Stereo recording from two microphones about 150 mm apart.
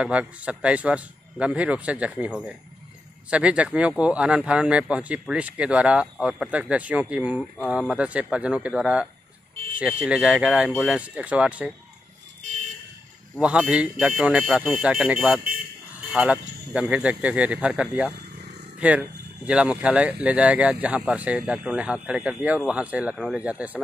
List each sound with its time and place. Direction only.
0.0 s speech: 5° right (ahead or behind)
10.7 s speech: 5° left (ahead or behind)
11.0 s speech: 10° right (ahead or behind)
13.4 s speech: 5° right (ahead or behind)